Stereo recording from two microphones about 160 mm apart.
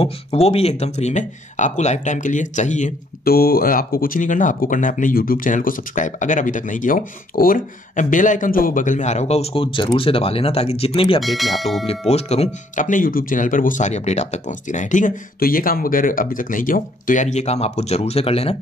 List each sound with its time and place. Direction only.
0.0 s speech: 40° left (ahead or behind)
3.3 s speech: 70° left (ahead or behind); by 11.1 s 35° left (ahead or behind)
11.1 s speech: centre (ahead or behind)
12.1 s speech: 40° left (ahead or behind)